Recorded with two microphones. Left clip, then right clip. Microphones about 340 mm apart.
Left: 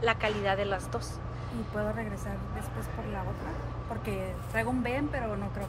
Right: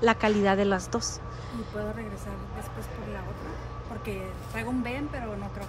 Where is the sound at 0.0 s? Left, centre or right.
Centre.